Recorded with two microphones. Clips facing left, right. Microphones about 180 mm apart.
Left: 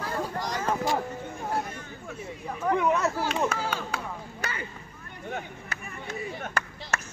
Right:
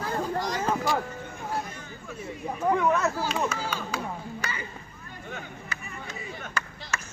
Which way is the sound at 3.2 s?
60° left (ahead or behind).